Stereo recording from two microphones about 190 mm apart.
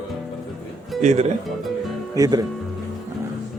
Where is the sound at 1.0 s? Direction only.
40° right (ahead or behind).